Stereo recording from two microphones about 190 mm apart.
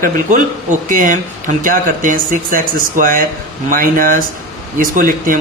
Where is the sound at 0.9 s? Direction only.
45° right (ahead or behind).